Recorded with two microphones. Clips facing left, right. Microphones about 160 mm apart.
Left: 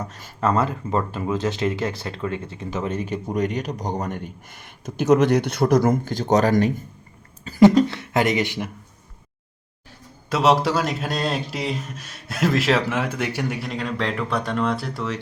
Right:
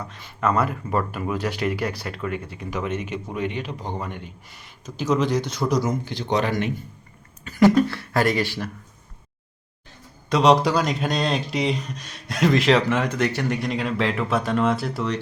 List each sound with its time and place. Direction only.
0.0 s speech: 40° left (ahead or behind)
0.3 s speech: 25° left (ahead or behind)
7.4 s speech: 25° left (ahead or behind)
10.2 s speech: 5° left (ahead or behind)